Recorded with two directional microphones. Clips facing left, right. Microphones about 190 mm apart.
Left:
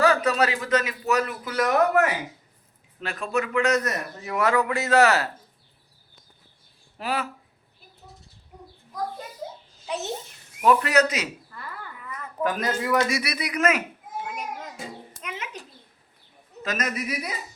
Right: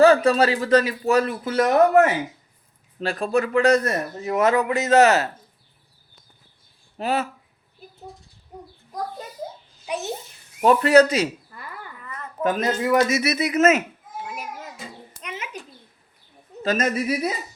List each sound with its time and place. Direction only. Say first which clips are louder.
0.0 s speech: right 6 dB; 30° right (ahead or behind)
4.2 s speech: right 3 dB; 20° right (ahead or behind)
7.0 s speech: right 5 dB; 25° right (ahead or behind)
9.8 s a child's voice: right 2 dB; 15° right (ahead or behind)
10.6 s speech: right 5 dB; 30° right (ahead or behind)
11.5 s a sound: even; 15° right (ahead or behind)
12.4 s speech: right 4 dB; 25° right (ahead or behind)
15.2 s a sound: right 2 dB; centre (ahead or behind)
16.6 s speech: right 7 dB; 30° right (ahead or behind)